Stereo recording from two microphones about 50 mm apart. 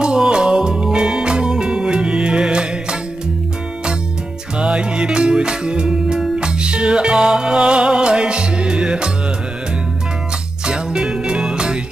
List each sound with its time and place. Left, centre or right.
0.0 s music: centre
4.6 s music: centre
10.6 s music: centre